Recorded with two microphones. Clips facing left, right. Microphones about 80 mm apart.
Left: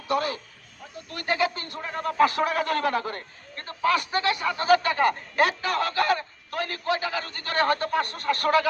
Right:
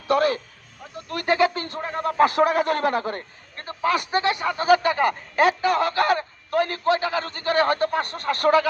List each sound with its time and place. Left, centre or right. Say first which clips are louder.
0.1 s a man's voice: right 6 dB; right
1.3 s speech: right 5 dB; right
1.9 s a man's voice: right 2 dB; centre
3.6 s speech: right 1 dB; centre
5.8 s a man's voice: right 3 dB; right
7.4 s a man's voice: right 4 dB; centre